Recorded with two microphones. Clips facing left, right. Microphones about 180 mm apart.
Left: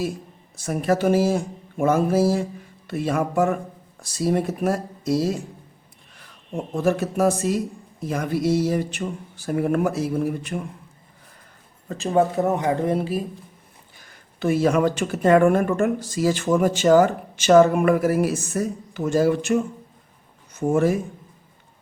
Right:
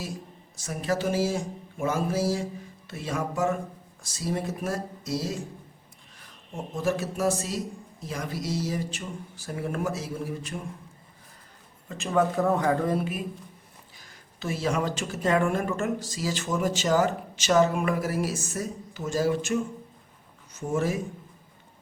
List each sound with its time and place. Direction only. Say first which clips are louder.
0.5 s speech: left 7 dB; 55° left (ahead or behind)
6.7 s speech: left 6 dB; 55° left (ahead or behind)
11.9 s speech: left 5 dB; 35° left (ahead or behind)
14.1 s speech: left 11 dB; 55° left (ahead or behind)